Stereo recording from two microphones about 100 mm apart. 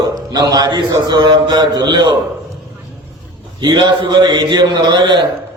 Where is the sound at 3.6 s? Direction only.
45° right (ahead or behind).